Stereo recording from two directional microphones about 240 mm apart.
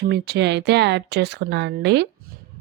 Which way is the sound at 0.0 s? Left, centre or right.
Right.